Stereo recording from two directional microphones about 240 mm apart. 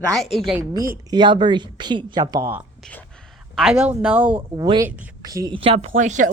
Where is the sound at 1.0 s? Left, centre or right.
Centre.